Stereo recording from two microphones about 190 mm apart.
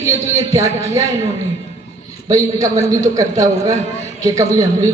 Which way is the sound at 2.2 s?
20° right (ahead or behind).